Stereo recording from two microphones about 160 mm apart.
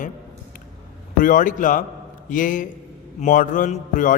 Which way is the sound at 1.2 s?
55° left (ahead or behind).